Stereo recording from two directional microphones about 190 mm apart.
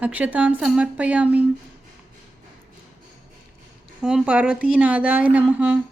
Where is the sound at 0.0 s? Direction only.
10° right (ahead or behind).